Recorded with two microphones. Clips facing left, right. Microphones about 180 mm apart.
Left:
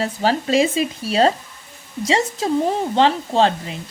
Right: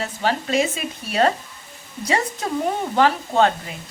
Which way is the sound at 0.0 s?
35° left (ahead or behind).